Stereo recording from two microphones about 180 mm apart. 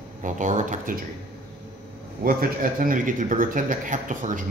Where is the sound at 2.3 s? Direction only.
50° right (ahead or behind).